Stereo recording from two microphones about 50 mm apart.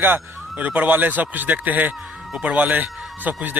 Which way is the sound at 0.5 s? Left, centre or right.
Right.